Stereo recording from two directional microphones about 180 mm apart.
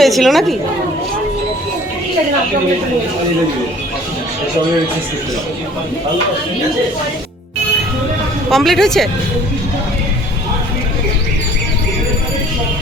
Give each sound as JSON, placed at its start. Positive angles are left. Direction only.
{"t": 0.0, "sound": "speech", "side_deg": 0}
{"t": 8.4, "sound": "speech", "side_deg": 0}